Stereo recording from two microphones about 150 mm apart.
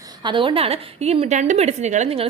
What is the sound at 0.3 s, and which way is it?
A woman's voice, 35° right (ahead or behind).